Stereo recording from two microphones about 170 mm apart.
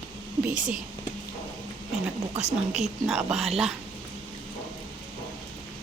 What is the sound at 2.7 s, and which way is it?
Speech, centre (ahead or behind).